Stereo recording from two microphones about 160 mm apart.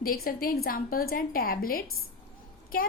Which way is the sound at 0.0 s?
65° left (ahead or behind).